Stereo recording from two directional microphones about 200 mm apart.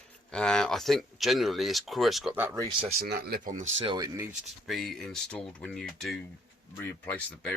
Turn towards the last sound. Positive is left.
turn(degrees=5)  # may be behind; listen again after turning